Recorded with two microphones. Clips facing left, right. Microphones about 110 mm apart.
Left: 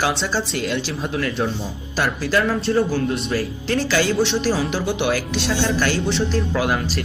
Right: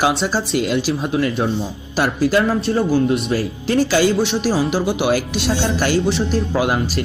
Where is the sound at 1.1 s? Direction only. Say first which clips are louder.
Right 3 dB; 20° right (ahead or behind).